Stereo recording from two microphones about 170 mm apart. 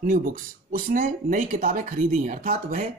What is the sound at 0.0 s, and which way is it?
Speech, 55° right (ahead or behind).